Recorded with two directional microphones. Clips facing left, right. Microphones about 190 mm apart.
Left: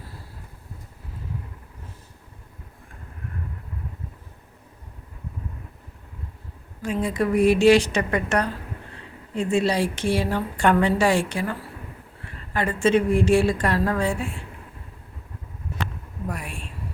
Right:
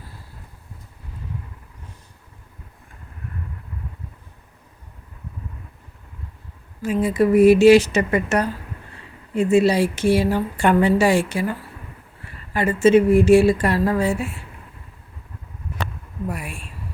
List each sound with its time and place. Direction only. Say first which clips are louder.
6.8 s a woman's voice: right 5 dB; 5° right (ahead or behind)
12.5 s a woman's voice: right 5 dB; 5° right (ahead or behind)
16.3 s a woman's voice: right 2 dB; 10° right (ahead or behind)